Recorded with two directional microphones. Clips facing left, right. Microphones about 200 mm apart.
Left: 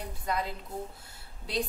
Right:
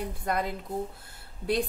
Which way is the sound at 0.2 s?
55° right (ahead or behind).